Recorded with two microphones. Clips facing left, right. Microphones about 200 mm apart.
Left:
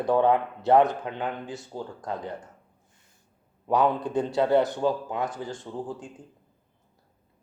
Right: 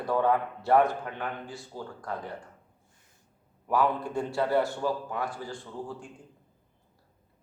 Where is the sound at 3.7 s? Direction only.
20° left (ahead or behind).